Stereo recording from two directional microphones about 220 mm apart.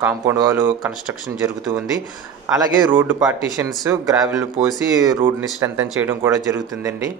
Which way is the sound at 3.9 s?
5° right (ahead or behind).